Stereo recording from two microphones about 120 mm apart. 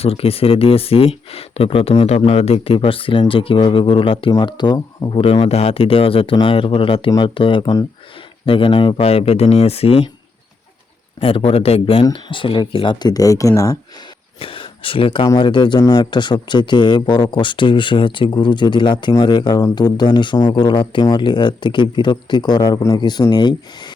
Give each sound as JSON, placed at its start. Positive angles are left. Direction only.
{"t": 0.0, "sound": "speech", "side_deg": 55}
{"t": 4.3, "sound": "speech", "side_deg": 35}
{"t": 5.1, "sound": "speech", "side_deg": 50}
{"t": 11.2, "sound": "speech", "side_deg": 50}
{"t": 14.3, "sound": "a sound", "side_deg": 45}
{"t": 15.4, "sound": "speech", "side_deg": 40}